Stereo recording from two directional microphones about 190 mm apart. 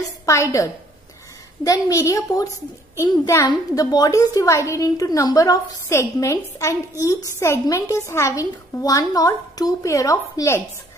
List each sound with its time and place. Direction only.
0.2 s a woman's voice: 15° left (ahead or behind)